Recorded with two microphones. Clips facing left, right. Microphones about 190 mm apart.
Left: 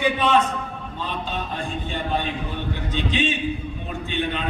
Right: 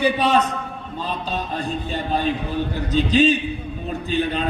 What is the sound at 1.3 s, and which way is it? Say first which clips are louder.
Music: right 3 dB; 40° right (ahead or behind).